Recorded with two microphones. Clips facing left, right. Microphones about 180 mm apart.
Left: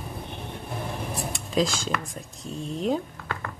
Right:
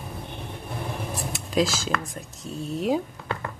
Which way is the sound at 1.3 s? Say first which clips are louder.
Right 1 dB; 5° right (ahead or behind).